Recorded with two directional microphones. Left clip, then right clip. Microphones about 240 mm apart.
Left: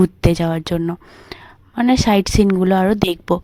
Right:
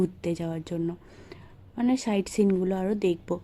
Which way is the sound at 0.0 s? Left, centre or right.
Left.